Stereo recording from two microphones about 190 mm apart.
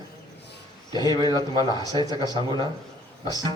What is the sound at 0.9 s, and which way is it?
Speech, 20° left (ahead or behind).